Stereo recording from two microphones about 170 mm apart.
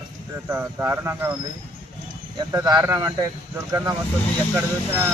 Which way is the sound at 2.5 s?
20° right (ahead or behind).